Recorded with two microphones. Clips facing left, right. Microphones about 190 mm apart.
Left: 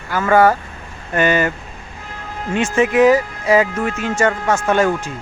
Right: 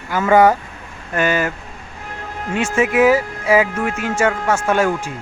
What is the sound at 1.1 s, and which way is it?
Speech, centre (ahead or behind).